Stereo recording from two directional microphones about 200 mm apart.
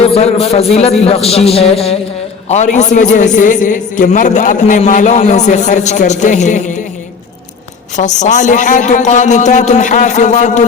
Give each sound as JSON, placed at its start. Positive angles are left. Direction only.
{"t": 0.0, "sound": "a man's voice", "side_deg": 30}
{"t": 7.9, "sound": "a man's voice", "side_deg": 35}